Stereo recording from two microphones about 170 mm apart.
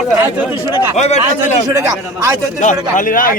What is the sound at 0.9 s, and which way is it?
Speech, 40° left (ahead or behind).